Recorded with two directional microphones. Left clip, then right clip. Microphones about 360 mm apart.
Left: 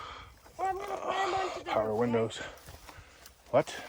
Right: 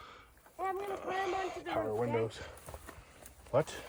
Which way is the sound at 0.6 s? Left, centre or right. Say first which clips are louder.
Left 4 dB; left.